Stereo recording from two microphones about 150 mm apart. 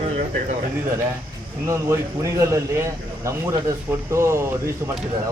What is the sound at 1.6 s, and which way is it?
Speech, 20° right (ahead or behind).